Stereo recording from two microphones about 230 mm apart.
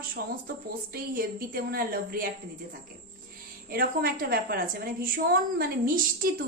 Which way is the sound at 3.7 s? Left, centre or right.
Right.